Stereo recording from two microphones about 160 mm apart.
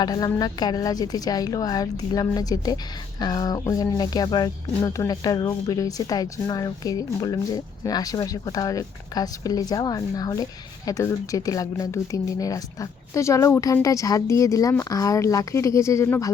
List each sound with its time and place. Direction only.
0.0 s speech: 25° left (ahead or behind)